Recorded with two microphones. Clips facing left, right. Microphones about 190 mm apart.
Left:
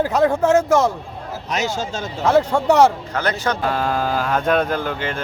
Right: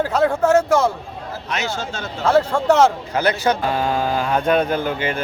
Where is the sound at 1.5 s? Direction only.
40° left (ahead or behind).